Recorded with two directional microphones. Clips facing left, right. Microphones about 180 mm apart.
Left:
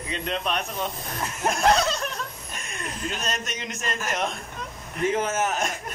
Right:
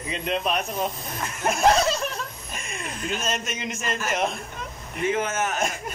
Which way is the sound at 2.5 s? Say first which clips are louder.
Right 2 dB; centre (ahead or behind).